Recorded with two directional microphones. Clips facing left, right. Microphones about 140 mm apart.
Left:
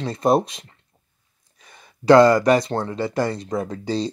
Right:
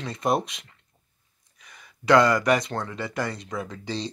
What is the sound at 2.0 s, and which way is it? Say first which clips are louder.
A man's voice: left 6 dB; 30° left (ahead or behind).